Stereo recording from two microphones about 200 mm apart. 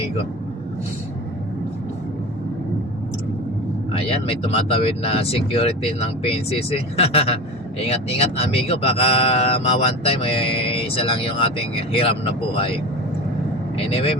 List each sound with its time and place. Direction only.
4.0 s speech: 30° left (ahead or behind)
13.7 s speech: 30° left (ahead or behind)